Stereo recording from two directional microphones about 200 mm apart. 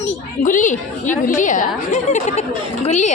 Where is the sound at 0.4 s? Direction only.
40° left (ahead or behind).